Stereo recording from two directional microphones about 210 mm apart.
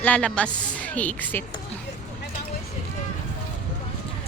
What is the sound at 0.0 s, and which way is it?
A woman's voice, 5° left (ahead or behind).